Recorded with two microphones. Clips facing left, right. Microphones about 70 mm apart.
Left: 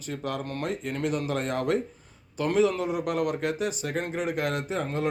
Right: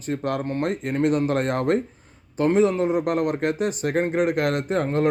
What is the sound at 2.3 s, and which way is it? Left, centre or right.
Speech, right.